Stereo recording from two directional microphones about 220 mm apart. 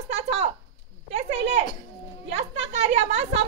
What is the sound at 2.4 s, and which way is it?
A woman's voice, 30° right (ahead or behind).